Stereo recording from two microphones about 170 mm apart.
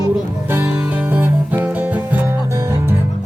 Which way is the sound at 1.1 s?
10° right (ahead or behind).